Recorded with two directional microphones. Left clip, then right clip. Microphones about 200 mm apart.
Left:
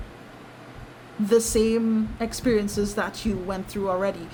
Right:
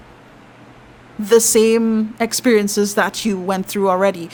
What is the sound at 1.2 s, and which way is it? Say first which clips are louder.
A woman's voice: right 8 dB; 45° right (ahead or behind).